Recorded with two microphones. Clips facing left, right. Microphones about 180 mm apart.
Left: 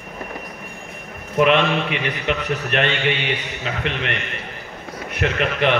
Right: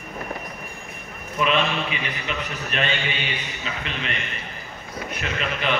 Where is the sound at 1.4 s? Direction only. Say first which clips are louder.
Left 6 dB; 65° left (ahead or behind).